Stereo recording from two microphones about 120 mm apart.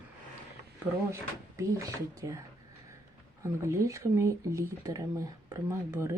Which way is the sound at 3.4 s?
25° right (ahead or behind).